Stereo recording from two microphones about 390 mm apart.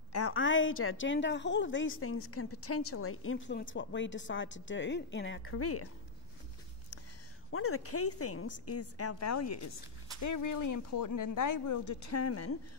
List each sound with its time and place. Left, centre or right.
0.1 s a woman's voice: left
7.5 s a woman's voice: left